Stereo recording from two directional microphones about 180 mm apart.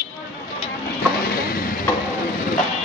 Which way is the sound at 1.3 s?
55° left (ahead or behind).